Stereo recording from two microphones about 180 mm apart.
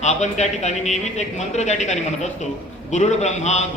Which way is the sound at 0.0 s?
40° left (ahead or behind).